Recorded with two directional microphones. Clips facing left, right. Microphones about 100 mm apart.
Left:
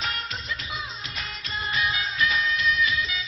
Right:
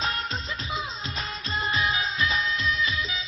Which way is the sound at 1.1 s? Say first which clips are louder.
Right 3 dB; 30° right (ahead or behind).